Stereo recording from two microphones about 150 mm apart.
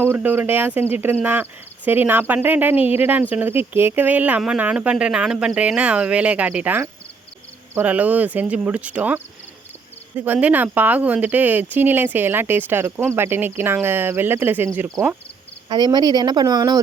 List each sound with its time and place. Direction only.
0.0 s speech: 15° right (ahead or behind)
15.7 s speech: 30° right (ahead or behind)